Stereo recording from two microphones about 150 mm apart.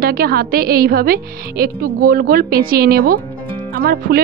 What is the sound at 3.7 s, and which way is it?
Music, 75° right (ahead or behind).